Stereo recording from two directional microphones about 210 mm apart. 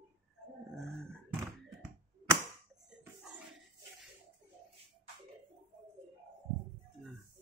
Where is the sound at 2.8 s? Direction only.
Centre (ahead or behind).